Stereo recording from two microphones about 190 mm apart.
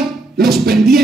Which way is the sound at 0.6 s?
55° right (ahead or behind).